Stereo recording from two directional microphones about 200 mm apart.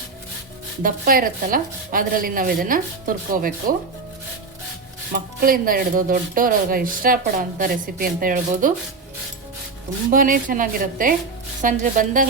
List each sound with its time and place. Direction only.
0.8 s speech: 45° right (ahead or behind)
5.1 s speech: 45° right (ahead or behind)
10.1 s a woman's voice: 45° right (ahead or behind)